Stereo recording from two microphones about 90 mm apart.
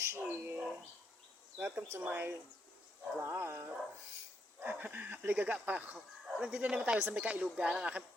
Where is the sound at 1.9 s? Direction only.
25° right (ahead or behind).